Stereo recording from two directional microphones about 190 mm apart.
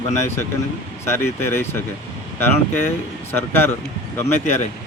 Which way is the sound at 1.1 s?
15° left (ahead or behind).